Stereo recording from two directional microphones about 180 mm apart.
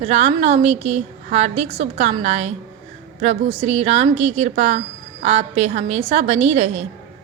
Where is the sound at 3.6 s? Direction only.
35° right (ahead or behind).